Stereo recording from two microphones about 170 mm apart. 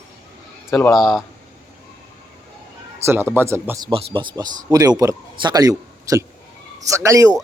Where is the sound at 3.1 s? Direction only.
15° right (ahead or behind).